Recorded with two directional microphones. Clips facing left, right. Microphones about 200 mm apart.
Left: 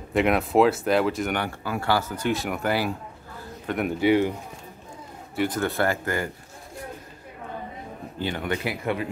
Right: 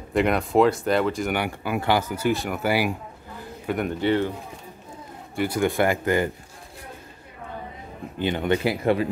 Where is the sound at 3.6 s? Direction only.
5° left (ahead or behind).